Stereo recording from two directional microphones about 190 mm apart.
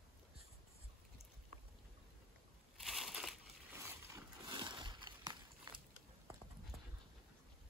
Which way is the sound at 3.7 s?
15° right (ahead or behind).